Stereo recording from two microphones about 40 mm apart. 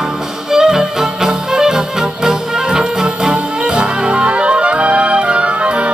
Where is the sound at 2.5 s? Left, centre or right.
Centre.